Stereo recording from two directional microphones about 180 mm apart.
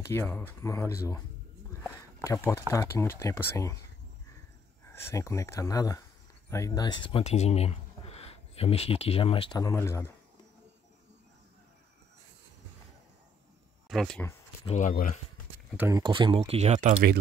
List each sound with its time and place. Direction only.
0.0 s speech: 10° left (ahead or behind)
1.8 s a sound: 15° left (ahead or behind)
2.7 s speech: 15° left (ahead or behind)
5.1 s speech: 15° left (ahead or behind)
13.8 s speech: centre (ahead or behind)
14.7 s speech: 45° left (ahead or behind)
15.9 s speech: 25° right (ahead or behind); by 17.2 s 50° right (ahead or behind)